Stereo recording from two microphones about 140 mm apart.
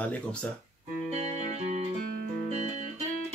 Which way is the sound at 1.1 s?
50° right (ahead or behind).